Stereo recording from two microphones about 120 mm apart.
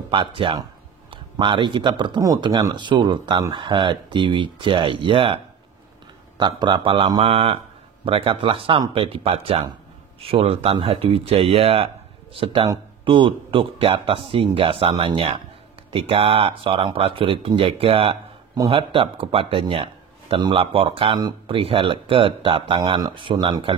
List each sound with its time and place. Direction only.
0.1 s speech: 45° right (ahead or behind)
13.0 s speech: 45° right (ahead or behind)